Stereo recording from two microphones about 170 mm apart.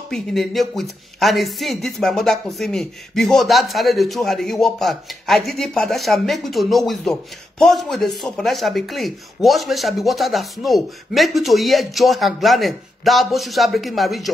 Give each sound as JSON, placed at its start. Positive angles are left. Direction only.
{"t": 0.1, "sound": "speech", "side_deg": 0}